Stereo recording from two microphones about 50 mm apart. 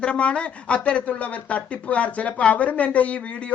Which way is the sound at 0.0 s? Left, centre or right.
Left.